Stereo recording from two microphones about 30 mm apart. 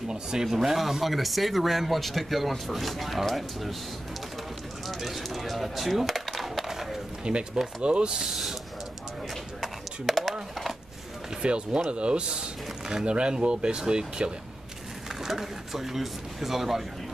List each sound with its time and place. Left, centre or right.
0.1 s speech: right
0.5 s speech: centre
4.8 s speech: centre
6.7 s skateboard: centre
7.3 s speech: right
8.3 s speech: centre
9.6 s a sound: centre
11.4 s speech: right
15.2 s speech: centre